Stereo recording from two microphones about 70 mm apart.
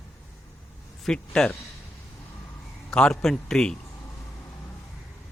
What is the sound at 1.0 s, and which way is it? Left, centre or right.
Speech, centre.